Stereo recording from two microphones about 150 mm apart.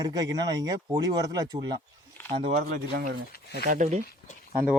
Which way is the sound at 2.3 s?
45° right (ahead or behind).